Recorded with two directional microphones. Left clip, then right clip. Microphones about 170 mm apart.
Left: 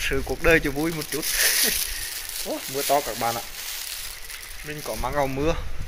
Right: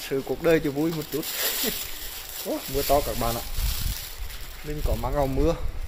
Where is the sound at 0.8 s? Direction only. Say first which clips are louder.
Even; 15° left (ahead or behind).